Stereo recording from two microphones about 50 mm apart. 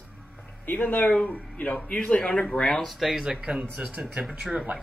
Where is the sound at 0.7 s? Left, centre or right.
Left; by 2.4 s centre.